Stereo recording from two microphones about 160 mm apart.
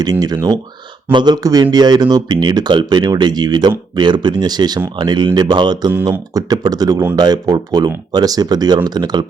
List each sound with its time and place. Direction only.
0.0 s speech: 25° right (ahead or behind)